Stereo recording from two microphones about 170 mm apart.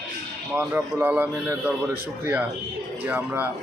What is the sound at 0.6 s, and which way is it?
A man's voice, 10° right (ahead or behind).